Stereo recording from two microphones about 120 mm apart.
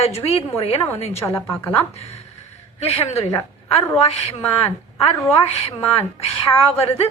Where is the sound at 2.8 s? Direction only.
60° left (ahead or behind).